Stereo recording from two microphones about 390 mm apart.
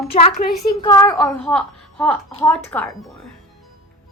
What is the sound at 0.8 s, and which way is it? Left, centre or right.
A child's voice, centre.